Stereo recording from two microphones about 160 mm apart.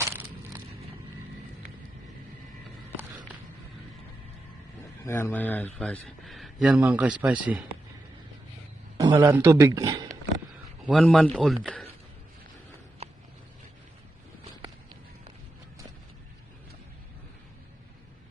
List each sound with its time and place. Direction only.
0.0 s crushing: 15° right (ahead or behind)
5.0 s speech: 15° left (ahead or behind); by 7.6 s 5° right (ahead or behind)
9.0 s speech: 20° right (ahead or behind)
10.9 s speech: 5° left (ahead or behind)